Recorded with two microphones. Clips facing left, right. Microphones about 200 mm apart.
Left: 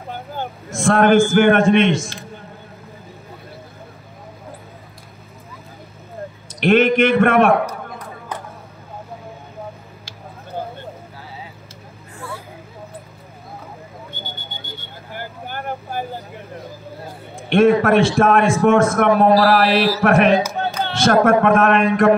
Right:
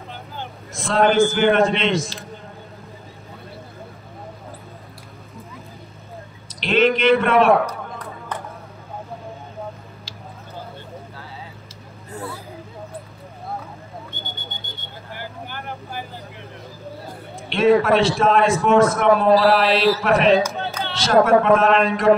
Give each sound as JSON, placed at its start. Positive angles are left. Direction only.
{"t": 0.1, "sound": "a man's voice", "side_deg": 50}
{"t": 6.6, "sound": "a man's voice", "side_deg": 50}
{"t": 15.1, "sound": "vehicle", "side_deg": 45}
{"t": 17.5, "sound": "a man's voice", "side_deg": 50}